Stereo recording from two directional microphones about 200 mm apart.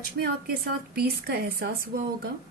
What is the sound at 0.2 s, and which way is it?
Speech, 55° right (ahead or behind).